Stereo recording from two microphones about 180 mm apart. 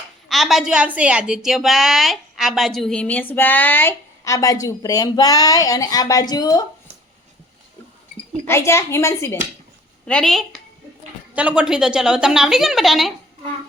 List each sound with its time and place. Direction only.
0.3 s a woman's voice: centre (ahead or behind); by 6.6 s 20° left (ahead or behind)
8.4 s speech: 15° left (ahead or behind)
10.1 s a woman's voice: 5° left (ahead or behind)